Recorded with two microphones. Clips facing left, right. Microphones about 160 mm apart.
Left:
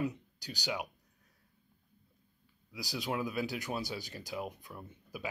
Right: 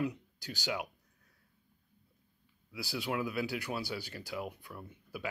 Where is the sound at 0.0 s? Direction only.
20° left (ahead or behind).